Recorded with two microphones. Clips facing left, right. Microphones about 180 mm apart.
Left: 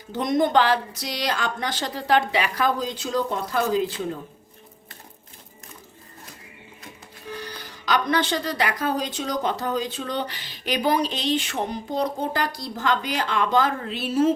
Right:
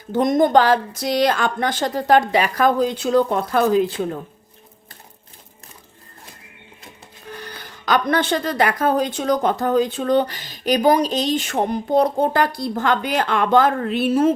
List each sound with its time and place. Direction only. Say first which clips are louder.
0.1 s speech: right 5 dB; 50° right (ahead or behind)
7.3 s speech: even; 55° right (ahead or behind)